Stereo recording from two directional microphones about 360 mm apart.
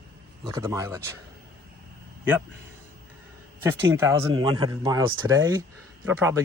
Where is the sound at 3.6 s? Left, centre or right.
Centre.